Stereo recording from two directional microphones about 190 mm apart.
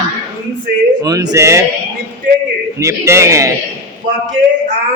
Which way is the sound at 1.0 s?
20° right (ahead or behind).